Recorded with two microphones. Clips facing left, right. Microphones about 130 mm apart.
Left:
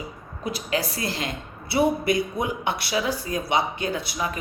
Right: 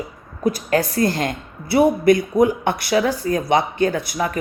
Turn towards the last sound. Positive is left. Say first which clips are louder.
# right 5 dB
turn(degrees=-45)  # may be behind; listen again after turning